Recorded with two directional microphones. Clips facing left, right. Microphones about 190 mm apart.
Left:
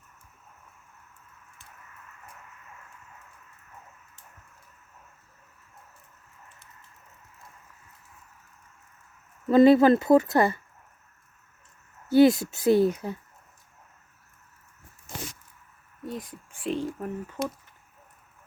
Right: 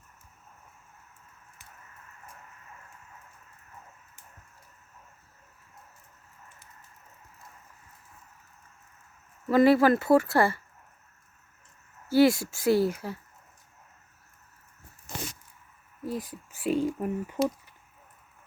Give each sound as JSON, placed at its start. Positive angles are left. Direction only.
{"t": 9.5, "sound": "speech", "side_deg": 20}
{"t": 12.1, "sound": "speech", "side_deg": 20}
{"t": 16.0, "sound": "speech", "side_deg": 0}